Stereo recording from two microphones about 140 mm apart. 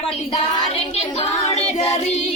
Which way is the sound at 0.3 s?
45° left (ahead or behind).